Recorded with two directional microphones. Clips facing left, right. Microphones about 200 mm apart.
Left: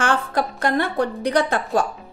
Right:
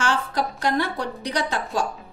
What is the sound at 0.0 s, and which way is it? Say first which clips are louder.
A woman's voice: left 3 dB; 55° left (ahead or behind).